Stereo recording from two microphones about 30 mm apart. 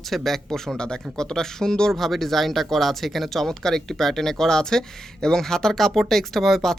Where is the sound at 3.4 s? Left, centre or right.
Centre.